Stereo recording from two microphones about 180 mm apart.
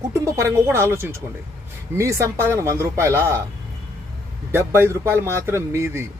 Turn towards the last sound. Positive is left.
turn(degrees=-15)  # may be behind; listen again after turning